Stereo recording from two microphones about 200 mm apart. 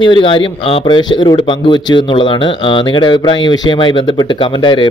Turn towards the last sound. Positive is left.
turn(degrees=25)  # may be behind; listen again after turning